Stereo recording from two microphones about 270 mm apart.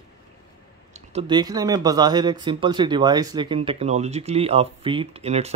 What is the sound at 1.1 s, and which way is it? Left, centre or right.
Speech, centre.